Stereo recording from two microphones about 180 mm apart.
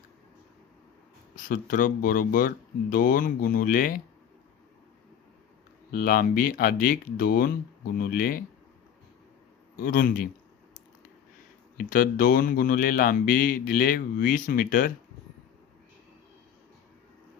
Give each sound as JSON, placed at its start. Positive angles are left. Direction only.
{"t": 1.5, "sound": "speech", "side_deg": 50}
{"t": 5.9, "sound": "speech", "side_deg": 55}
{"t": 9.8, "sound": "speech", "side_deg": 50}
{"t": 11.9, "sound": "speech", "side_deg": 55}